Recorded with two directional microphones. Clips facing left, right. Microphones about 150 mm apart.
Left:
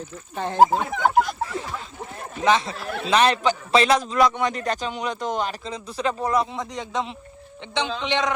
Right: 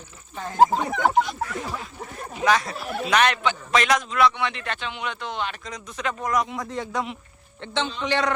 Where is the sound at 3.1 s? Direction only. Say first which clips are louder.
Left 3 dB; 30° left (ahead or behind).